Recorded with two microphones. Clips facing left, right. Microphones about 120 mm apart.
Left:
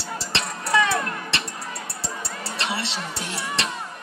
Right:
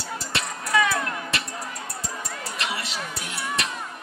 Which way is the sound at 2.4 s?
30° left (ahead or behind).